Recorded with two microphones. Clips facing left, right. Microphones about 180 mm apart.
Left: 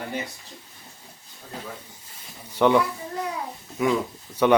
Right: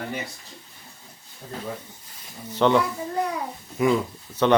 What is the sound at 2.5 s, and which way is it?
Speech, 10° left (ahead or behind).